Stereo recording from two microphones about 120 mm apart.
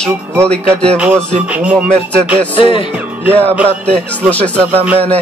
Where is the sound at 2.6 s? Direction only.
45° left (ahead or behind).